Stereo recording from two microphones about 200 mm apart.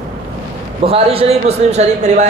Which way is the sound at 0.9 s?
30° right (ahead or behind).